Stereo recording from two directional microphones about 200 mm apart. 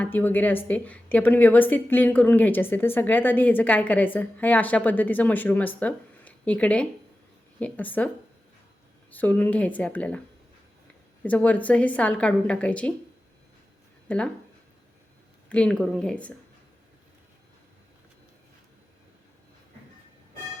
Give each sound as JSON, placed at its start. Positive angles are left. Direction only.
{"t": 0.0, "sound": "a woman's voice", "side_deg": 10}
{"t": 11.2, "sound": "a woman's voice", "side_deg": 5}
{"t": 14.1, "sound": "a woman's voice", "side_deg": 5}
{"t": 15.4, "sound": "speech", "side_deg": 5}